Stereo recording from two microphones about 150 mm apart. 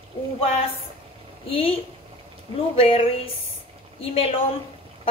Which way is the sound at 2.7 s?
35° left (ahead or behind).